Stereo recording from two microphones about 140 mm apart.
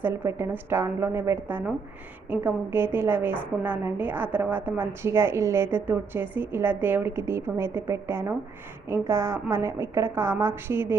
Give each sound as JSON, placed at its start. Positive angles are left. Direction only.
{"t": 0.0, "sound": "a woman's voice", "side_deg": -15}